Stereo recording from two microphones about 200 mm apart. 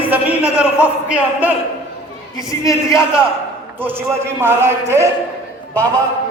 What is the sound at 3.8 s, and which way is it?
A man's voice, 10° right (ahead or behind).